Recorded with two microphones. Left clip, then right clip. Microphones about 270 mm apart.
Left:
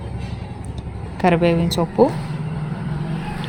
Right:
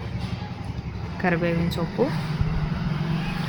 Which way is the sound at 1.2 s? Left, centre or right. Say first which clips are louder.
Left 8 dB; centre.